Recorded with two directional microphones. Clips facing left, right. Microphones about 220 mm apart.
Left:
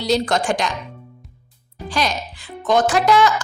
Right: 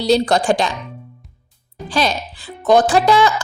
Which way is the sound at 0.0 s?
35° right (ahead or behind).